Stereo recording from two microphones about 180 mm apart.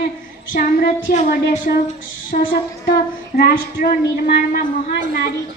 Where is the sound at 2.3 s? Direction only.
50° left (ahead or behind).